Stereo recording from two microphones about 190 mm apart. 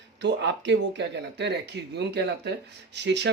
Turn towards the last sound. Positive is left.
turn(degrees=-65)  # may be behind; listen again after turning